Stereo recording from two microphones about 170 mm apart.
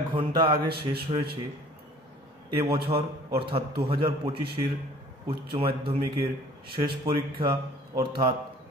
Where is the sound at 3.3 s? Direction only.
30° right (ahead or behind).